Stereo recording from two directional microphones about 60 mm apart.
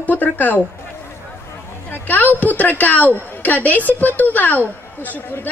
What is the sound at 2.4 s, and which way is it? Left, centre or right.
Speech, left.